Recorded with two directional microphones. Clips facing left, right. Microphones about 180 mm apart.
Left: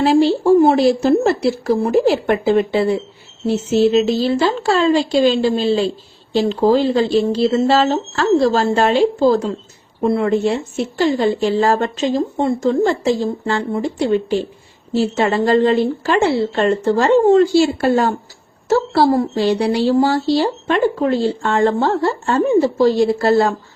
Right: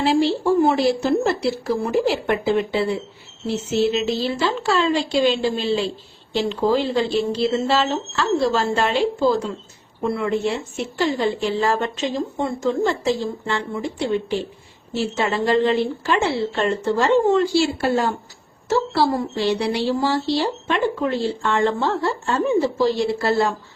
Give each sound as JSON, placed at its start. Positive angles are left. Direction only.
{"t": 0.0, "sound": "speech", "side_deg": 40}